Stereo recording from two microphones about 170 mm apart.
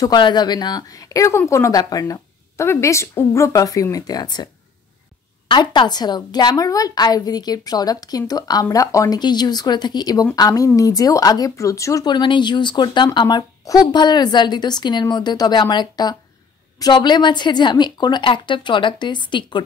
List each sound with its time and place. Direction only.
0.0 s speech: 25° left (ahead or behind)
5.5 s speech: 25° left (ahead or behind)